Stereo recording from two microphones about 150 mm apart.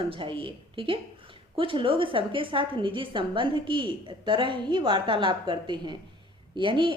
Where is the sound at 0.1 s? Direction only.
35° right (ahead or behind).